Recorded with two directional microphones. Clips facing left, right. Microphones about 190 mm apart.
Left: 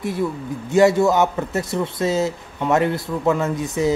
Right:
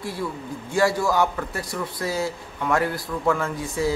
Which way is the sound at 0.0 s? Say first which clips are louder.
Left 6 dB; 20° left (ahead or behind).